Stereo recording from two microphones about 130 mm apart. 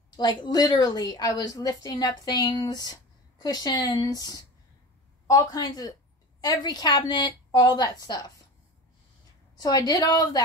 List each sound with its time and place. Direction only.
0.1 s a woman's voice: 30° left (ahead or behind)
9.6 s a woman's voice: 30° left (ahead or behind)